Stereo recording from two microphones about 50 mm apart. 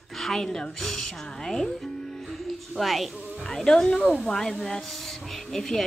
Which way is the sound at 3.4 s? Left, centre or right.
Centre.